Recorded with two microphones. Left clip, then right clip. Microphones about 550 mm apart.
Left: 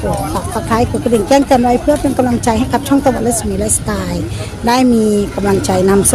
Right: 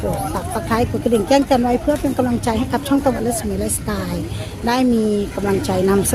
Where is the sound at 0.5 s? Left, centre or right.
Right.